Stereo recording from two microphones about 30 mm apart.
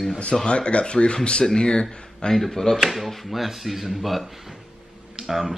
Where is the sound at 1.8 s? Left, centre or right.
Centre.